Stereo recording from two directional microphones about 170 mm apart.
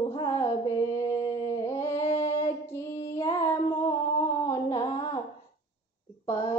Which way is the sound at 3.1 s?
15° left (ahead or behind).